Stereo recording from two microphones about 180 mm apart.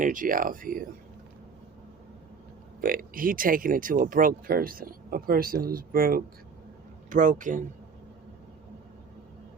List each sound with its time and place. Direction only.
0.0 s speech: 50° right (ahead or behind)
2.8 s speech: 55° right (ahead or behind)